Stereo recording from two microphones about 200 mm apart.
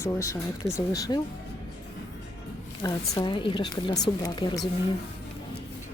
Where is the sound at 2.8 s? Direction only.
20° left (ahead or behind).